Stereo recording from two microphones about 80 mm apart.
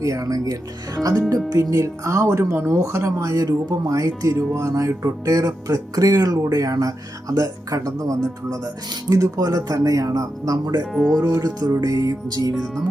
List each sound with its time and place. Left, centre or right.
0.0 s speech: right
1.7 s speech: right
10.9 s speech: centre
11.3 s speech: right